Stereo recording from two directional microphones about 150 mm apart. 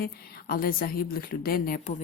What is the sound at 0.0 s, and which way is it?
A woman's voice, 75° left (ahead or behind).